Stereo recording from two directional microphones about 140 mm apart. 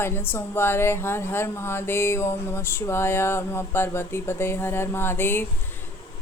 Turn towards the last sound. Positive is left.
turn(degrees=15)  # may be behind; listen again after turning